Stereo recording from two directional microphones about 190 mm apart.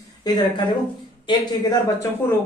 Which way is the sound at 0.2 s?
20° left (ahead or behind).